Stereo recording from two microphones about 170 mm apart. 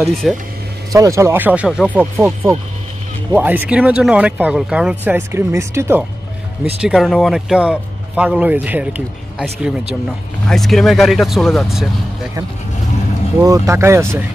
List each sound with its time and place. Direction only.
0.0 s speech: centre (ahead or behind)
0.9 s speech: 20° right (ahead or behind)
6.8 s speech: centre (ahead or behind)
13.4 s speech: 20° right (ahead or behind)